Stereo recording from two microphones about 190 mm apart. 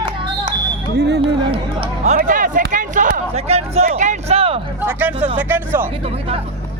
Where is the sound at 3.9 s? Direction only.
35° right (ahead or behind).